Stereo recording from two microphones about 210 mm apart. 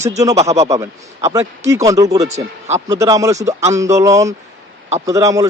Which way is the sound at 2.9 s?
15° right (ahead or behind).